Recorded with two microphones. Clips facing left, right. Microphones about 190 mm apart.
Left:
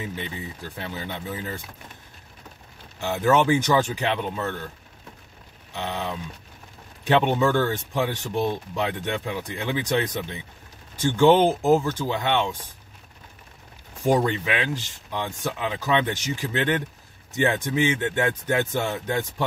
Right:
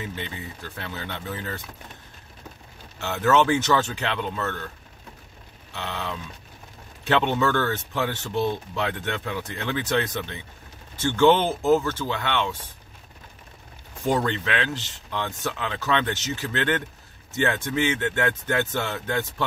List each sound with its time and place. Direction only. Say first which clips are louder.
0.2 s speech: left 1 dB; 15° left (ahead or behind)
3.0 s speech: even; 15° left (ahead or behind)
5.7 s speech: left 2 dB; 15° left (ahead or behind)
14.0 s speech: left 3 dB; 15° left (ahead or behind)